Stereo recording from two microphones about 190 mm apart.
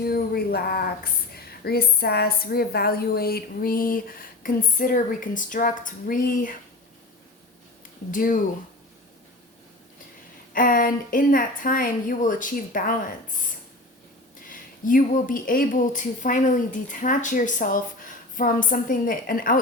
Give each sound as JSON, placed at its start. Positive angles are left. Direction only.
{"t": 0.0, "sound": "speech", "side_deg": 55}
{"t": 8.1, "sound": "speech", "side_deg": 45}
{"t": 10.5, "sound": "speech", "side_deg": 45}
{"t": 14.5, "sound": "speech", "side_deg": 45}